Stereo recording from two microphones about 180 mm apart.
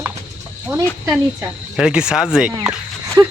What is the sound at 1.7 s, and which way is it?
Speech, 5° right (ahead or behind).